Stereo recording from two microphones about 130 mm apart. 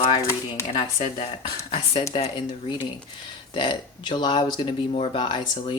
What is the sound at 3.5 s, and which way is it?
Speech, 35° left (ahead or behind).